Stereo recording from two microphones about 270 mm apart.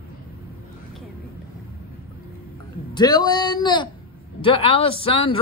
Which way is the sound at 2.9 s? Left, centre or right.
Centre.